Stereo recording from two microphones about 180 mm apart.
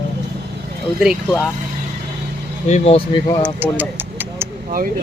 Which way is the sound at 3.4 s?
10° right (ahead or behind).